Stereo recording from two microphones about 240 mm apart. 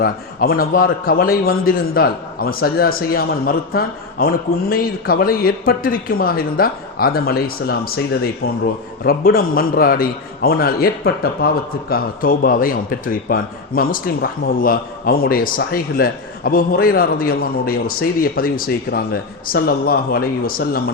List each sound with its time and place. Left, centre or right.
0.0 s a man's voice: left